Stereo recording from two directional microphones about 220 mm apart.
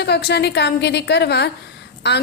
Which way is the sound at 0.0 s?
50° left (ahead or behind).